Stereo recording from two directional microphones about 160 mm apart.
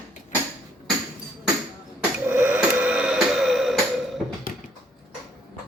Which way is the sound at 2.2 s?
10° right (ahead or behind).